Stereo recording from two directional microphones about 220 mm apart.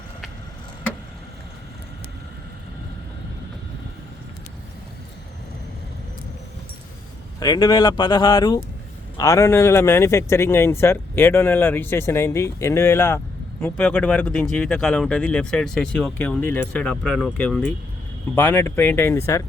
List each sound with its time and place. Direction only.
7.3 s speech: 20° left (ahead or behind)